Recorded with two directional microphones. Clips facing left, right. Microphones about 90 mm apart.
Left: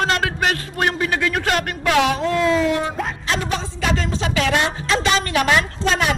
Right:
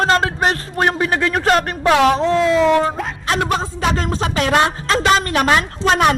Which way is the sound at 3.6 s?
45° right (ahead or behind).